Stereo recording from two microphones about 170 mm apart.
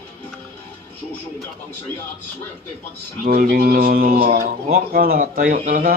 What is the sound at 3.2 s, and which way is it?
Speech, 65° right (ahead or behind).